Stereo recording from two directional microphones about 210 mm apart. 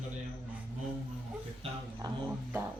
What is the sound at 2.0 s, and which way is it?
Music, 20° right (ahead or behind).